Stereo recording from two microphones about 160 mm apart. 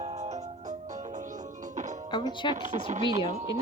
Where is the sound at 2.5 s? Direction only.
50° right (ahead or behind).